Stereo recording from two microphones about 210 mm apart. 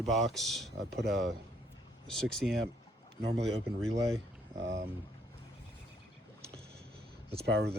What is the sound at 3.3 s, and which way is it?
Speech, 55° right (ahead or behind).